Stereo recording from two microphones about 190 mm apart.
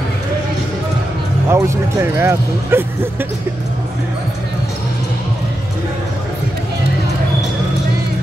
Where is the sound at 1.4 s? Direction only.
15° right (ahead or behind).